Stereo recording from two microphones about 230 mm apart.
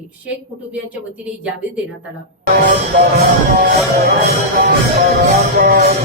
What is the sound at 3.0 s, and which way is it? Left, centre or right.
Speech, right.